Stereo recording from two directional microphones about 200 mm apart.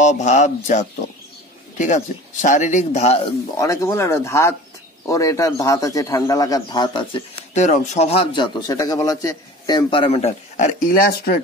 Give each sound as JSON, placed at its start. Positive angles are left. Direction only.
{"t": 0.0, "sound": "speech", "side_deg": 35}
{"t": 3.5, "sound": "speech", "side_deg": 15}
{"t": 7.5, "sound": "a man's voice", "side_deg": 35}